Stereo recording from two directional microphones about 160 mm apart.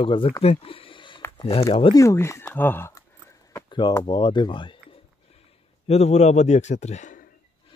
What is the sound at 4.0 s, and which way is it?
Speech, 30° left (ahead or behind).